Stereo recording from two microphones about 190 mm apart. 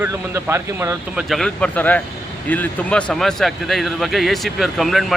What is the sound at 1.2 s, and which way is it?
Speech, centre (ahead or behind).